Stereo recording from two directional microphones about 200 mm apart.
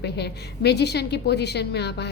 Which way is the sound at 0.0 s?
55° left (ahead or behind).